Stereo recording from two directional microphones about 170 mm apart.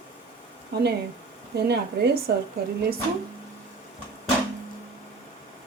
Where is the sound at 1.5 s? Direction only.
75° right (ahead or behind).